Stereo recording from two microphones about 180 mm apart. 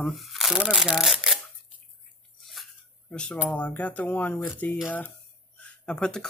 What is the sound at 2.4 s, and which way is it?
Speech, centre (ahead or behind).